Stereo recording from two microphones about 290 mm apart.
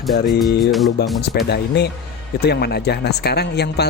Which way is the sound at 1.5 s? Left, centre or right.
Left.